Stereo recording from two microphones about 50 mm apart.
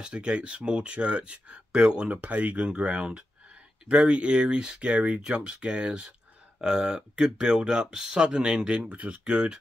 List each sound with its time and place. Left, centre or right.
0.0 s speech: centre
2.2 s speech: right
9.2 s speech: centre